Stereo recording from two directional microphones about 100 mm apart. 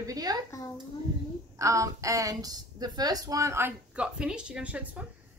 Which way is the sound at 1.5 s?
35° right (ahead or behind).